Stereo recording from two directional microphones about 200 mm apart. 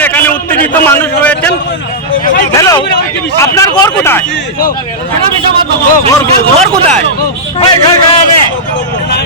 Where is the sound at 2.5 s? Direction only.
15° left (ahead or behind).